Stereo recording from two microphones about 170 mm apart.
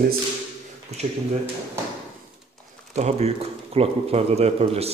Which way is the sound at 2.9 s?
40° right (ahead or behind).